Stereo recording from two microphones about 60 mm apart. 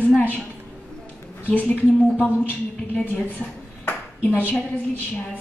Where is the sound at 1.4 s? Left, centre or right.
Left.